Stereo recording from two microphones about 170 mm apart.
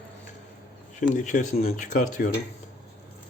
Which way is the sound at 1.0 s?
50° left (ahead or behind).